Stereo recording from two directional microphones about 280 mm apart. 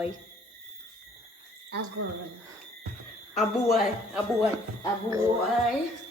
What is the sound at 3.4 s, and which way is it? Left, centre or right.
Speech, centre.